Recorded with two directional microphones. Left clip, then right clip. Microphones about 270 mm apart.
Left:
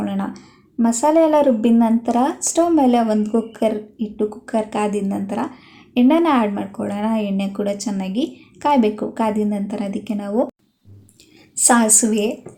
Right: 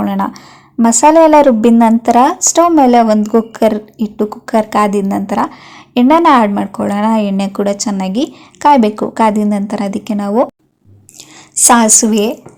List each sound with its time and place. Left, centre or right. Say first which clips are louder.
0.0 s speech: right 9 dB; right
11.5 s speech: right 7 dB; right